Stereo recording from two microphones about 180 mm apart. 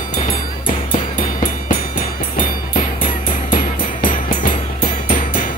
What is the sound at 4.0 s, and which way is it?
Music, 50° left (ahead or behind).